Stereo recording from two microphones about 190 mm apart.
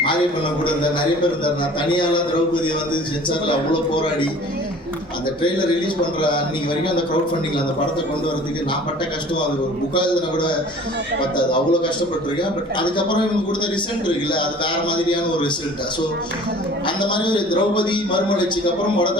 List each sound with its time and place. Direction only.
1.5 s a man's voice: 25° left (ahead or behind)
5.4 s a man's voice: 25° left (ahead or behind)
9.9 s a man's voice: 25° left (ahead or behind)
14.3 s a man's voice: 25° left (ahead or behind)
16.8 s a man's voice: 25° left (ahead or behind)